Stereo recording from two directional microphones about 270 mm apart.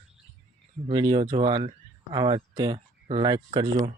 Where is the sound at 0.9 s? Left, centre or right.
Centre.